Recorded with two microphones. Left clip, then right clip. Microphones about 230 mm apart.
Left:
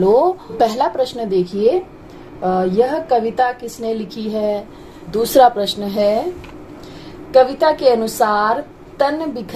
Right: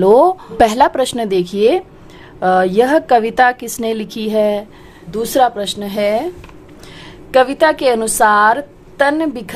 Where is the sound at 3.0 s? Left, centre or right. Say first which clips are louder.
Right 5 dB; right.